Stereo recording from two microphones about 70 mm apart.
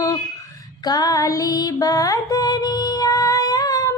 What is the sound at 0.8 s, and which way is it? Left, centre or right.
Music, left.